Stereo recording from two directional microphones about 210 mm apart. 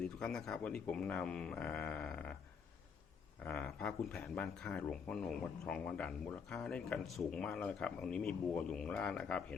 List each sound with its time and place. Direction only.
0.2 s speech: 5° left (ahead or behind)
3.4 s speech: 5° left (ahead or behind)